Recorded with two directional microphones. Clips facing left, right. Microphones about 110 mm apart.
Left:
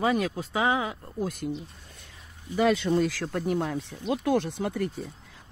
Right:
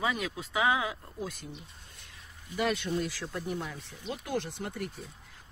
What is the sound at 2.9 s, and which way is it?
Speech, 90° left.